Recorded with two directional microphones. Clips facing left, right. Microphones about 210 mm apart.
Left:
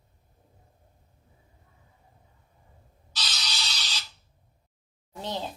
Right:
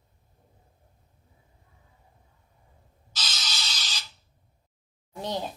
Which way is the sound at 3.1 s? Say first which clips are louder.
Even; 45° right (ahead or behind).